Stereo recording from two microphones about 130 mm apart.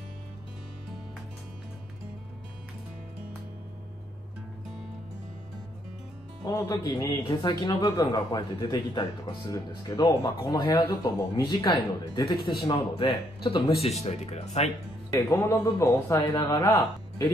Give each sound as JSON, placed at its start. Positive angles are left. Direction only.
{"t": 6.4, "sound": "speech", "side_deg": 25}
{"t": 15.0, "sound": "speech", "side_deg": 25}